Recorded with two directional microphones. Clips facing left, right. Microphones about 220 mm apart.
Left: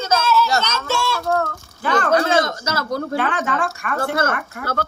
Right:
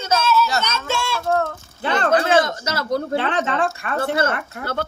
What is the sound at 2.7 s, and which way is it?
Speech, 25° right (ahead or behind).